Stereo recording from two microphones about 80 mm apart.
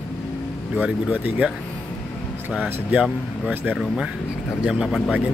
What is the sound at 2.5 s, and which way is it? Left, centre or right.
Speech, centre.